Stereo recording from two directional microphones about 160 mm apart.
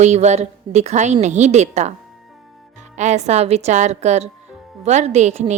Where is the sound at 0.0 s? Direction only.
45° right (ahead or behind).